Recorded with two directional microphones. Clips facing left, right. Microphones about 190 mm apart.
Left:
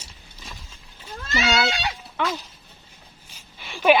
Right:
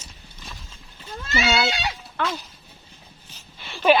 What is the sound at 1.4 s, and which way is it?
Speech, 10° right (ahead or behind).